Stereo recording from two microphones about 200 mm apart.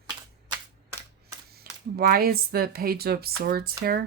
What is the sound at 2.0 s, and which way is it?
Speech, 50° right (ahead or behind).